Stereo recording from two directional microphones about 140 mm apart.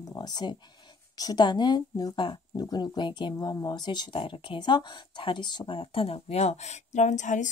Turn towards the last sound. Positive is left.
turn(degrees=60)  # may be behind; listen again after turning